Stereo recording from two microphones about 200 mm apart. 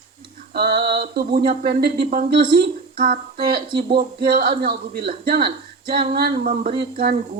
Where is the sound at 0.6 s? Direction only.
55° right (ahead or behind).